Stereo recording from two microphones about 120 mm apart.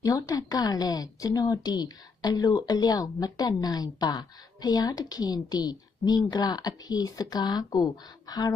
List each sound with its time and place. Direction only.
0.0 s a woman's voice: 30° left (ahead or behind)